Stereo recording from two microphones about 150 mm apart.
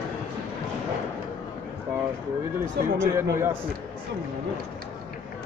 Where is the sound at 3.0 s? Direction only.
15° right (ahead or behind).